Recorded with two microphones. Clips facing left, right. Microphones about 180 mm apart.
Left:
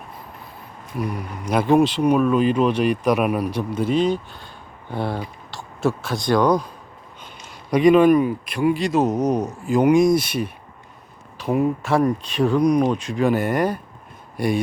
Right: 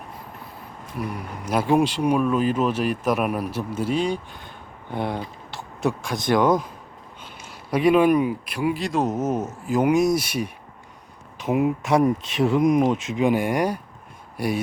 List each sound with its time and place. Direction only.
1.5 s speech: 5° right (ahead or behind); by 6.7 s 20° right (ahead or behind)
7.7 s speech: 5° right (ahead or behind)